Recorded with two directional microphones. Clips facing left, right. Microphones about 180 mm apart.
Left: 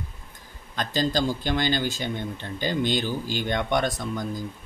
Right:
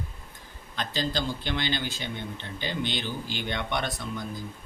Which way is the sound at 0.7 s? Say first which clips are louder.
Left 5 dB; 45° left (ahead or behind).